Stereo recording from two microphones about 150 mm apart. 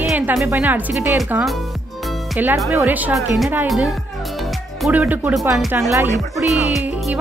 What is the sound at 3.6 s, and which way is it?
Music, centre (ahead or behind).